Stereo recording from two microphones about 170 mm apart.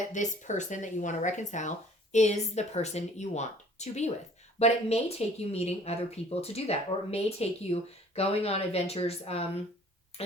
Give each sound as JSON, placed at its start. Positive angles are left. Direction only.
{"t": 0.0, "sound": "speech", "side_deg": 45}